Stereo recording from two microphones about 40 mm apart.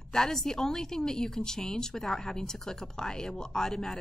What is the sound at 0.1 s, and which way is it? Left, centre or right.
A woman's voice, centre.